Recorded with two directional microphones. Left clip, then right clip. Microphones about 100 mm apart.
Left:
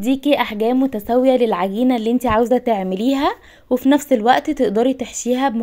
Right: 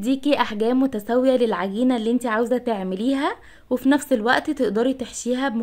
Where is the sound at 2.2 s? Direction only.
40° left (ahead or behind).